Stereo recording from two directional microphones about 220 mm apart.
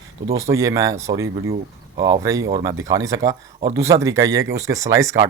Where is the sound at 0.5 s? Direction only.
15° right (ahead or behind).